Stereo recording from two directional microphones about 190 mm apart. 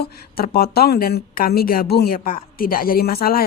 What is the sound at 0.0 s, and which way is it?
Speech, 55° left (ahead or behind).